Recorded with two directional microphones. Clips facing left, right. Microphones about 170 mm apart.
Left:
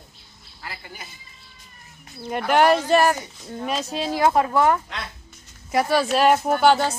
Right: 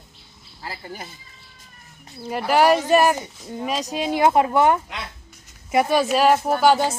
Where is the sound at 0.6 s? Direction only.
35° right (ahead or behind).